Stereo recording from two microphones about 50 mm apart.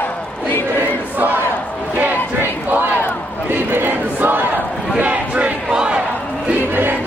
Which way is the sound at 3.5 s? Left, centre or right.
Right.